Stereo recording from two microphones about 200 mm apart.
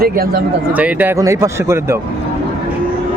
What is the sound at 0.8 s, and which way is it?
Speech, 10° right (ahead or behind).